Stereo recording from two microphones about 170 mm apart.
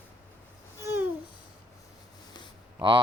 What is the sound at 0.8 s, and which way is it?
Babbling, 15° right (ahead or behind).